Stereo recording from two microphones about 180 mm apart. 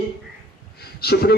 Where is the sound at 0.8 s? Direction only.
60° left (ahead or behind).